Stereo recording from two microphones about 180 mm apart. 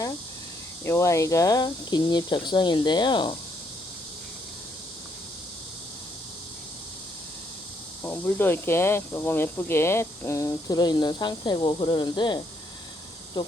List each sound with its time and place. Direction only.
0.9 s speech: 15° left (ahead or behind)
8.0 s speech: 10° left (ahead or behind)